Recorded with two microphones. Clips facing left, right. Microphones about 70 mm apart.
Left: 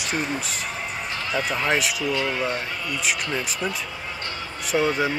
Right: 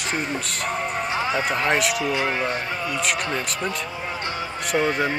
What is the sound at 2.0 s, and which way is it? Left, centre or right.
Speech, centre.